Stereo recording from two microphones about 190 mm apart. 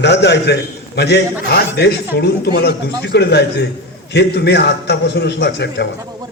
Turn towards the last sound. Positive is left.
turn(degrees=60)  # may be behind; listen again after turning